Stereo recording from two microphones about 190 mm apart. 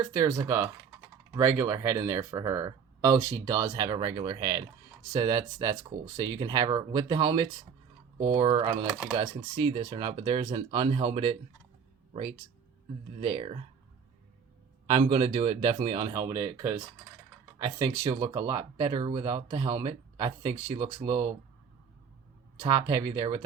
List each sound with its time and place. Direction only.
0.0 s speech: 15° right (ahead or behind)
13.1 s speech: 25° right (ahead or behind)
14.8 s speech: 30° right (ahead or behind)
22.6 s speech: 20° right (ahead or behind)